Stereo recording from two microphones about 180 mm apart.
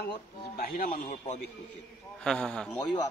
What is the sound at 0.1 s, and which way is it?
Speech, 55° left (ahead or behind).